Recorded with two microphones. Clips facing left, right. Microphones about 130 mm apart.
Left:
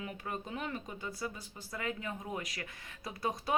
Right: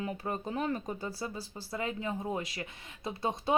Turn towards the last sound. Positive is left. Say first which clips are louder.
# right 4 dB
turn(degrees=-25)  # may be behind; listen again after turning